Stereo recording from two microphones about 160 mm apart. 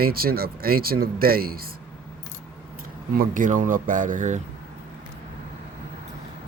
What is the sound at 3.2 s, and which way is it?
Speech, 55° right (ahead or behind).